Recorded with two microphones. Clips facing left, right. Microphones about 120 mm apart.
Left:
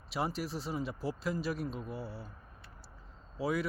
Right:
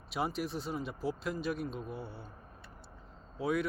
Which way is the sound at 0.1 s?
Centre (ahead or behind).